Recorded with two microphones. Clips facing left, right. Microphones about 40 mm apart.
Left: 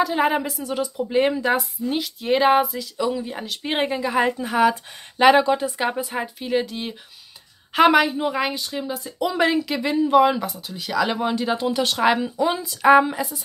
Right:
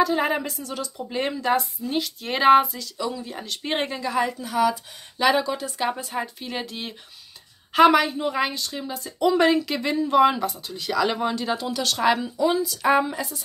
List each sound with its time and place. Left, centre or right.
0.0 s speech: centre
0.7 s speech: centre
2.8 s a woman's voice: centre
4.2 s a woman's voice: left
5.8 s a woman's voice: centre
12.4 s a woman's voice: left
12.8 s a woman's voice: centre